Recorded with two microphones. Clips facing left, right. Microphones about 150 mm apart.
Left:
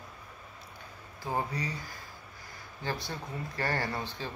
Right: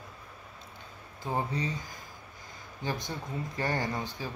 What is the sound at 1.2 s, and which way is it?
Speech, 20° right (ahead or behind).